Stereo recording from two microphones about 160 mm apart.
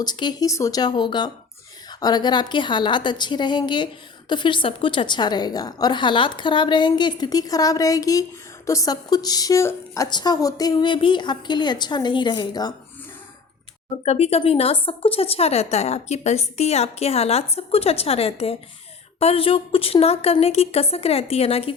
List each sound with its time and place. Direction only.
0.0 s a woman's voice: 25° left (ahead or behind)
14.0 s a woman's voice: 40° left (ahead or behind)